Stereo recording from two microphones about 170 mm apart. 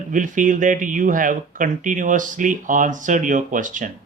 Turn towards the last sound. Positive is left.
turn(degrees=-50)  # may be behind; listen again after turning